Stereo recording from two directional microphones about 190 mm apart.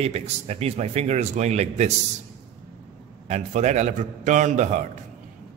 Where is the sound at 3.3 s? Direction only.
35° right (ahead or behind).